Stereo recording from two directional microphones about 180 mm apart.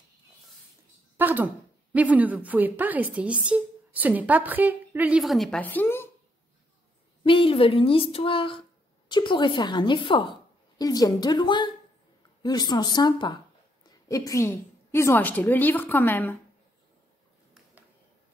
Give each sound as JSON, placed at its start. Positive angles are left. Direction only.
{"t": 1.1, "sound": "a woman's voice", "side_deg": -10}
{"t": 7.2, "sound": "a woman's voice", "side_deg": 30}